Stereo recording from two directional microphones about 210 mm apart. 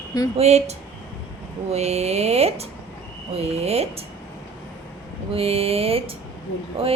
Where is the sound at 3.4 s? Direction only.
30° right (ahead or behind).